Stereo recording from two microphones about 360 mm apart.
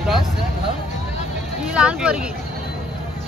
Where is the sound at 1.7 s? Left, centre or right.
Centre.